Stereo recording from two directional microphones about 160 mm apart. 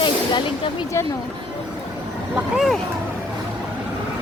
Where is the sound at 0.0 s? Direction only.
30° left (ahead or behind).